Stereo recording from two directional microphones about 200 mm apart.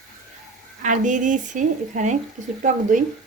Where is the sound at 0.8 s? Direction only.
40° right (ahead or behind).